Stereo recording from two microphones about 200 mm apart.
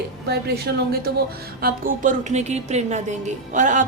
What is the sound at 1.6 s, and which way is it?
A woman's voice, 45° right (ahead or behind).